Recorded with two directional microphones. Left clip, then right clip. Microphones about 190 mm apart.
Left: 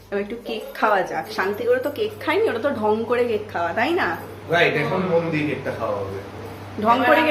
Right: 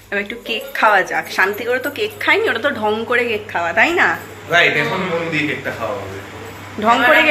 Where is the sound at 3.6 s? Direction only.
15° right (ahead or behind).